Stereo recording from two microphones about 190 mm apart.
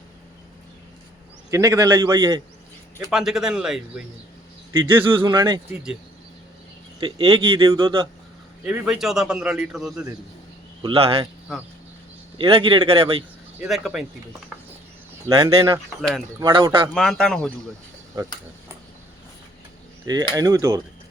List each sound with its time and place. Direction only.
1.5 s speech: 15° right (ahead or behind)
3.1 s a man's voice: 5° right (ahead or behind)
5.3 s speech: 20° right (ahead or behind)
7.0 s speech: 25° right (ahead or behind)
8.6 s a man's voice: 5° right (ahead or behind)
10.8 s speech: 30° right (ahead or behind)
12.4 s speech: 30° right (ahead or behind)
13.6 s a man's voice: centre (ahead or behind)
15.3 s mechanisms: 15° right (ahead or behind)
16.0 s a man's voice: centre (ahead or behind)
16.4 s speech: 25° right (ahead or behind)
16.9 s a man's voice: 5° left (ahead or behind)
20.3 s mechanisms: 20° right (ahead or behind)